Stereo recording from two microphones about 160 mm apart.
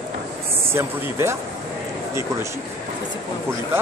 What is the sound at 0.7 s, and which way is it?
Speech, 15° right (ahead or behind).